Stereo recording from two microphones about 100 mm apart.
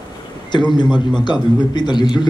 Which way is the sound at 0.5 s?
50° left (ahead or behind).